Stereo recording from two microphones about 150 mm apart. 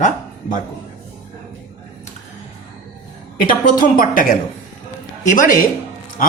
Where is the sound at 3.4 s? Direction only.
65° left (ahead or behind).